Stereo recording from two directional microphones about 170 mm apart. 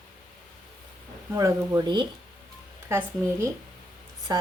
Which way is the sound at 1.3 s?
20° right (ahead or behind).